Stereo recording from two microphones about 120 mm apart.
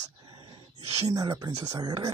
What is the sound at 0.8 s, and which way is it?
Speech, 60° right (ahead or behind).